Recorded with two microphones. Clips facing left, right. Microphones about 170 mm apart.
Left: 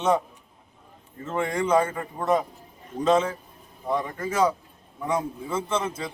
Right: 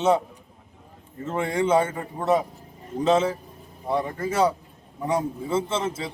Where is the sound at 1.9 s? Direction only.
5° right (ahead or behind).